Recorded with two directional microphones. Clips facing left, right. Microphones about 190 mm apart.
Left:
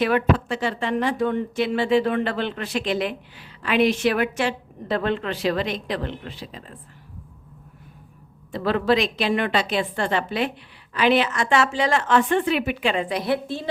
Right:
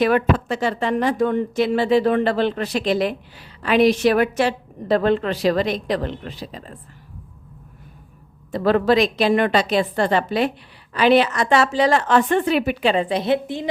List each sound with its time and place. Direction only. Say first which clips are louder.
0.0 s a woman's voice: right 3 dB; 40° right (ahead or behind)
8.5 s a woman's voice: right 4 dB; 45° right (ahead or behind); by 13.7 s 20° right (ahead or behind)